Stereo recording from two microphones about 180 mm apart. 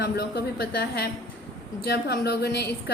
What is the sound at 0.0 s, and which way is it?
A woman's voice, 60° left (ahead or behind).